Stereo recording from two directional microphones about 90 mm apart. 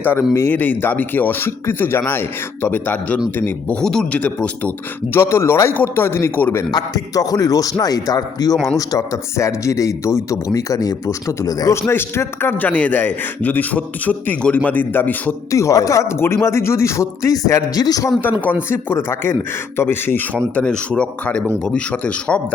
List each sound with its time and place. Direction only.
0.0 s a man's voice: 20° left (ahead or behind)
3.8 s speech: 10° left (ahead or behind)
5.1 s a man's voice: 30° left (ahead or behind)
6.7 s a man's voice: 45° left (ahead or behind)
8.5 s speech: centre (ahead or behind)
8.9 s a man's voice: 35° left (ahead or behind)
11.8 s a man's voice: 25° left (ahead or behind)
15.5 s a man's voice: 40° left (ahead or behind)
18.7 s a man's voice: 25° left (ahead or behind)
20.6 s speech: 10° left (ahead or behind)